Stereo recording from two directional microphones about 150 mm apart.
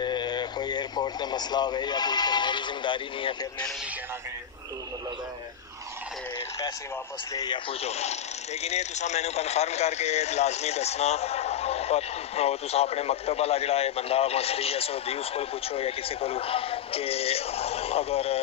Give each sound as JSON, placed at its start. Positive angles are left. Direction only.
{"t": 0.0, "sound": "speech", "side_deg": 30}
{"t": 7.3, "sound": "speech", "side_deg": 30}
{"t": 7.8, "sound": "speech", "side_deg": 45}